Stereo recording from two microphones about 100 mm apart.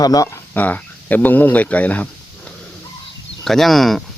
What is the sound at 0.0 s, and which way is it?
Speech, 35° left (ahead or behind).